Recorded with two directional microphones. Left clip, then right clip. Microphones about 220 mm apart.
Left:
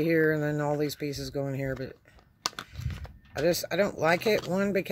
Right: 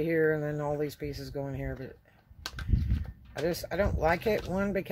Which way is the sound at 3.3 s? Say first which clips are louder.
Left 4 dB; 30° left (ahead or behind).